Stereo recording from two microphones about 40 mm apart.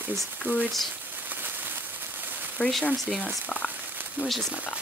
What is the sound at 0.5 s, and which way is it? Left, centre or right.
Speech, right.